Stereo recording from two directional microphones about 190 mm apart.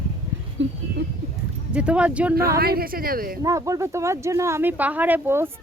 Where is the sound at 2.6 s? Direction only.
55° right (ahead or behind).